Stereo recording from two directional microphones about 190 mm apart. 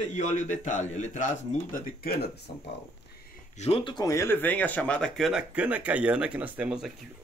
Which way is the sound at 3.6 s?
30° left (ahead or behind).